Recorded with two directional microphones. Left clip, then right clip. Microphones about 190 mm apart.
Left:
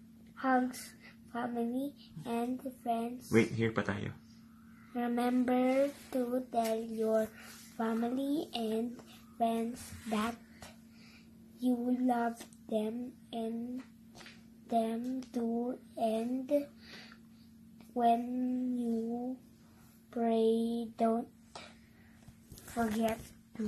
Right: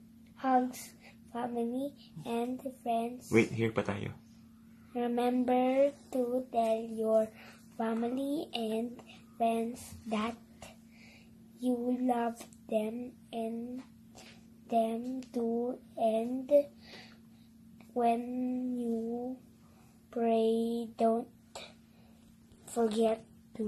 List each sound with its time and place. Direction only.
0.4 s a woman's voice: centre (ahead or behind)
3.3 s speech: 20° right (ahead or behind)
4.9 s a woman's voice: centre (ahead or behind)
14.7 s a woman's voice: centre (ahead or behind)